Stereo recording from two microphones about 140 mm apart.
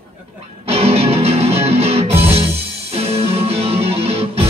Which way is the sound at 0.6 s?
45° right (ahead or behind).